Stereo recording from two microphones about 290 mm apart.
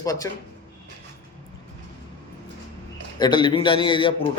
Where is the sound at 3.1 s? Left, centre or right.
Centre.